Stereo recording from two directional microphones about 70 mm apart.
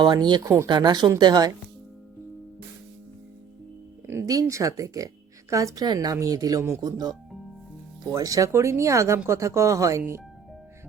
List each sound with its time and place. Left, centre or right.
0.2 s speech: right
1.2 s speech: right
4.0 s music: right
4.3 s speech: right
5.8 s speech: right
6.1 s speech: right
6.6 s speech: right
6.8 s speech: right
8.1 s speech: right
8.5 s speech: right